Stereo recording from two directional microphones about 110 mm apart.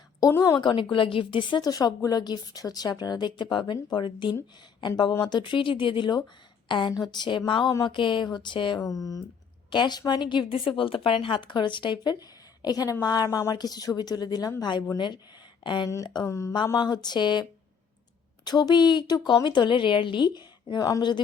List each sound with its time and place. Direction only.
0.2 s speech: 30° left (ahead or behind)
0.6 s a woman's voice: 45° left (ahead or behind)
7.7 s a woman's voice: 35° left (ahead or behind)
7.9 s a woman's voice: 50° left (ahead or behind)
16.2 s speech: 25° left (ahead or behind)
16.7 s a woman's voice: 40° left (ahead or behind)
18.4 s a woman's voice: 40° left (ahead or behind)